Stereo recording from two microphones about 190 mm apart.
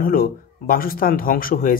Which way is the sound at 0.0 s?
50° left (ahead or behind).